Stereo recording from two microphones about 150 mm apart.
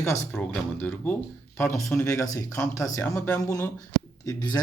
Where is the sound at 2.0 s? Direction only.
20° left (ahead or behind).